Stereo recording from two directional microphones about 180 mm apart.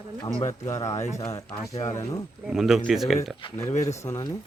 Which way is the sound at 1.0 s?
40° left (ahead or behind).